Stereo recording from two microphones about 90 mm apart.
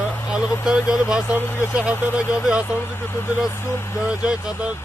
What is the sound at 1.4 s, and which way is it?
Speech, 25° left (ahead or behind).